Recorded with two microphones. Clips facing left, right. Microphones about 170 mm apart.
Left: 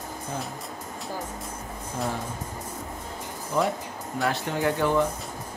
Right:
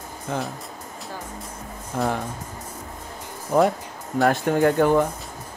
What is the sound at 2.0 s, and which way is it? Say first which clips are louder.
Speech: right 6 dB; 70° right (ahead or behind).